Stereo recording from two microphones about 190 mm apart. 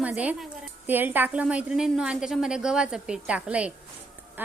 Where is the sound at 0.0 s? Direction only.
5° right (ahead or behind).